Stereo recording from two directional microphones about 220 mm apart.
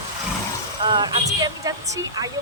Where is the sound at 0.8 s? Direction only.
20° right (ahead or behind).